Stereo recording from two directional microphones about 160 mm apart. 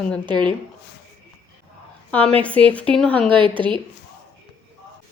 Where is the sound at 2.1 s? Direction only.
10° left (ahead or behind).